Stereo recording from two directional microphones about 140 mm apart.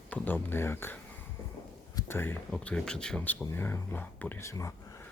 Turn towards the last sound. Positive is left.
turn(degrees=20)  # may be behind; listen again after turning